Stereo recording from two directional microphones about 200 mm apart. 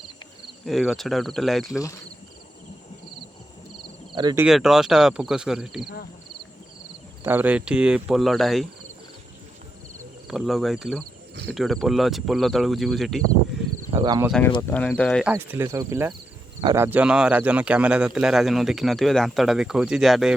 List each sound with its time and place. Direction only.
0.6 s speech: centre (ahead or behind)
4.1 s speech: 20° right (ahead or behind)
4.4 s speech: 5° right (ahead or behind)
7.3 s speech: 10° right (ahead or behind)
10.2 s speech: centre (ahead or behind)
13.9 s speech: 20° right (ahead or behind)
14.7 s speech: 5° left (ahead or behind)
15.3 s speech: 10° right (ahead or behind)